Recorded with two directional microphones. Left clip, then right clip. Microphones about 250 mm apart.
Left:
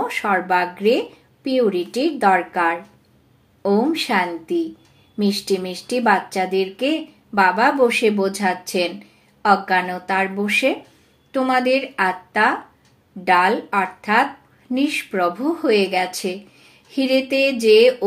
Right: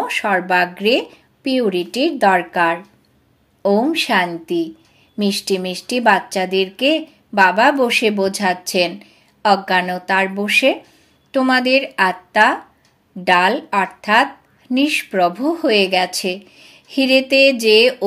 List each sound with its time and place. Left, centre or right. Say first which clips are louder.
0.0 s a woman's voice: right 2 dB; right